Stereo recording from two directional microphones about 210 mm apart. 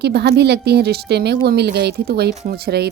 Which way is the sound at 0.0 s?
50° right (ahead or behind).